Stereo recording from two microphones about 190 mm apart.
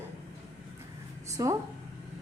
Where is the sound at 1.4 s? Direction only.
20° right (ahead or behind).